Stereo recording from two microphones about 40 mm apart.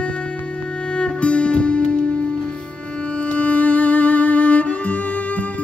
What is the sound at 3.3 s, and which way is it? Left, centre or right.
Music, left.